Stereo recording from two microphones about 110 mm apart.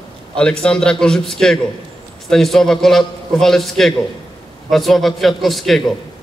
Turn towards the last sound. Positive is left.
turn(degrees=0)  # may be behind; listen again after turning